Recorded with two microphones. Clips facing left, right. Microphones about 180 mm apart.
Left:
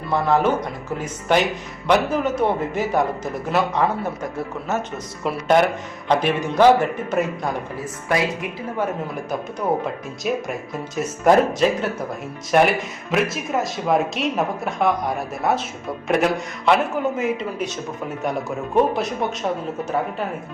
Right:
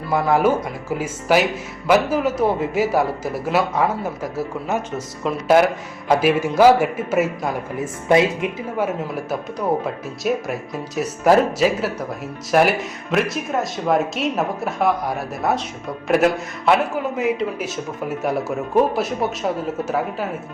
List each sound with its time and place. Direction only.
0.1 s a man's voice: 10° right (ahead or behind)
7.8 s speech: 20° right (ahead or behind)
9.3 s speech: centre (ahead or behind)